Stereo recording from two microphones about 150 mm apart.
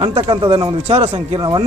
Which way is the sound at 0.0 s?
35° right (ahead or behind).